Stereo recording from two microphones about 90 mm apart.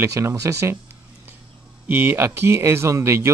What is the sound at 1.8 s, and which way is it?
Speech, 25° right (ahead or behind).